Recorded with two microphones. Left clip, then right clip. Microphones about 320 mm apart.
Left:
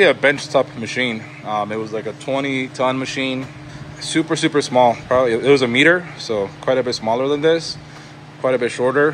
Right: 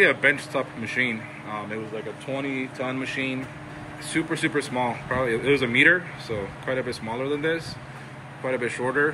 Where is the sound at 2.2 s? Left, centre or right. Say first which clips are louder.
Left 9 dB; left.